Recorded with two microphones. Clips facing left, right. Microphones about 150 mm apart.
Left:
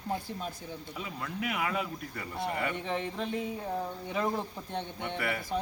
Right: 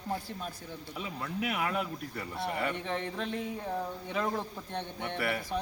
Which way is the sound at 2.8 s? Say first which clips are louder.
Left 1 dB; 15° left (ahead or behind).